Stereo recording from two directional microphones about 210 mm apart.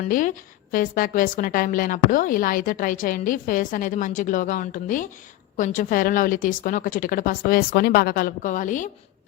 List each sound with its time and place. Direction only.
0.0 s a woman's voice: 40° left (ahead or behind)